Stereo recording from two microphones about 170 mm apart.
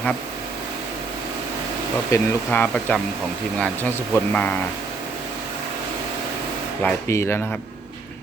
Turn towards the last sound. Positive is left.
turn(degrees=15)  # may be behind; listen again after turning